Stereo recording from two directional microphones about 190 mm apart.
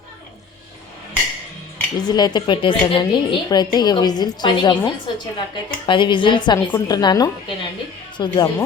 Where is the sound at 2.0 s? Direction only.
20° left (ahead or behind).